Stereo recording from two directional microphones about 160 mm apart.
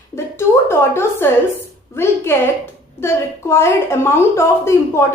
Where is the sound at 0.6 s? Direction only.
15° left (ahead or behind).